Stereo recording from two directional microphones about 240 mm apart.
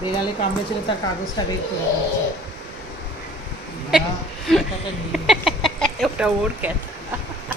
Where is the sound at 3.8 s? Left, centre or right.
Centre.